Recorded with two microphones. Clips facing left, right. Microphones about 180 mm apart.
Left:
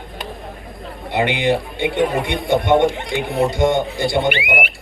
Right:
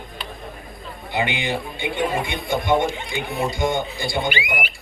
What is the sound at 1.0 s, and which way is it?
A man's voice, 75° left (ahead or behind).